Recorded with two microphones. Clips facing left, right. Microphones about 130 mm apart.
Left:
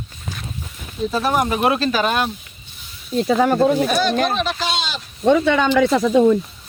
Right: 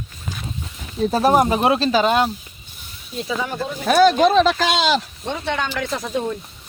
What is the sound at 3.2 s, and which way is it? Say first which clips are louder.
Speech: left 10 dB; 60° left (ahead or behind).